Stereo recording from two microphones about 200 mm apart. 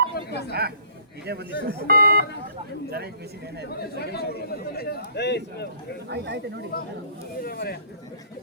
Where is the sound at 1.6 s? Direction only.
50° right (ahead or behind).